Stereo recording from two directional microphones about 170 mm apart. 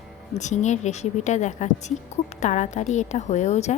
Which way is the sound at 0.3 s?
45° left (ahead or behind).